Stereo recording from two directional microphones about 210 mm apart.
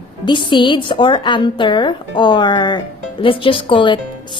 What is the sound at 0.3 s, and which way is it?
A woman's voice, 20° left (ahead or behind).